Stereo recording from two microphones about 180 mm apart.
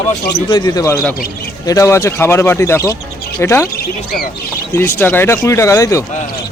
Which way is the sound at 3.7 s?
60° left (ahead or behind).